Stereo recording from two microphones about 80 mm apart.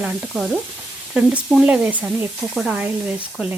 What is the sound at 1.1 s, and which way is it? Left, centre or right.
Frying, centre.